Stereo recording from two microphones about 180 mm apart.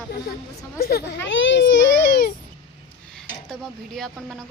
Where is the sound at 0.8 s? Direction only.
60° left (ahead or behind).